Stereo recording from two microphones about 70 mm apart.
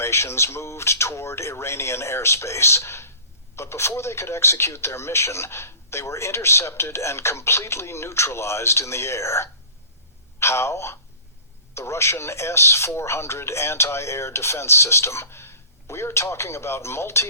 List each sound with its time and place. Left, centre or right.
0.0 s speech: left